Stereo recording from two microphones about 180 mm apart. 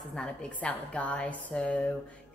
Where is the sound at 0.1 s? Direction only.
5° left (ahead or behind).